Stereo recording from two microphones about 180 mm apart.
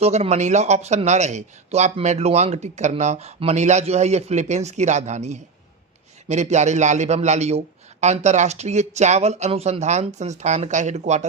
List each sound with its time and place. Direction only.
0.0 s speech: 35° right (ahead or behind)